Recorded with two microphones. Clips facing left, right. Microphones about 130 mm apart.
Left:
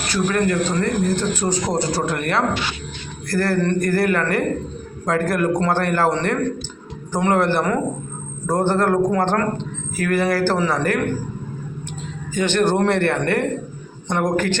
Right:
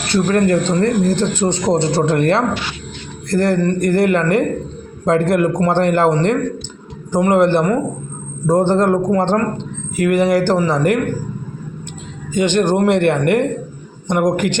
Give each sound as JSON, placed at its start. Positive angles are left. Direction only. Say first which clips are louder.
{"t": 0.1, "sound": "a man's voice", "louder": "right 5 dB", "side_deg": -35}
{"t": 12.3, "sound": "speech", "louder": "right 3 dB", "side_deg": -15}